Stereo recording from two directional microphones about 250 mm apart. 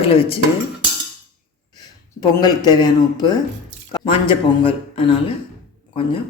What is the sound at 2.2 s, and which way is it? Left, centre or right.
A man's voice, centre.